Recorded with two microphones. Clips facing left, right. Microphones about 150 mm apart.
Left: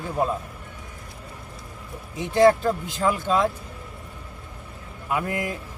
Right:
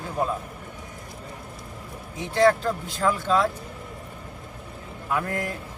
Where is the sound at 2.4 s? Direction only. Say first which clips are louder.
Left 3 dB; 15° left (ahead or behind).